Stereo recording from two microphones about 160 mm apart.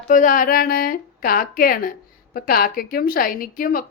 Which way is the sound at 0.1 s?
55° left (ahead or behind).